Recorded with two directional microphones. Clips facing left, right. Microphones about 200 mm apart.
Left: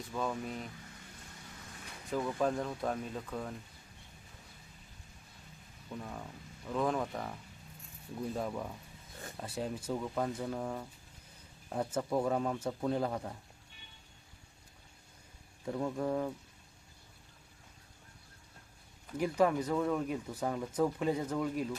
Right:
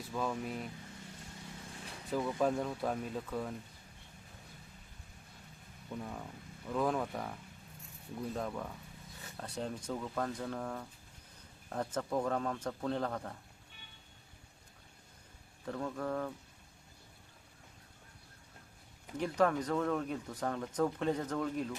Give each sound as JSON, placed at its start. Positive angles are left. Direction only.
{"t": 0.1, "sound": "speech", "side_deg": 0}
{"t": 2.0, "sound": "speech", "side_deg": -5}
{"t": 6.0, "sound": "speech", "side_deg": 0}
{"t": 8.4, "sound": "speech", "side_deg": 10}
{"t": 15.6, "sound": "speech", "side_deg": 15}
{"t": 19.1, "sound": "speech", "side_deg": 10}